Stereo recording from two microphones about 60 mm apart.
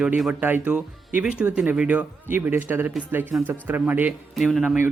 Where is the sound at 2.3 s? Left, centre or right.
Right.